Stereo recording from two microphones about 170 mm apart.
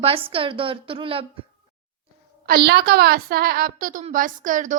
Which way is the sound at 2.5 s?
70° right (ahead or behind).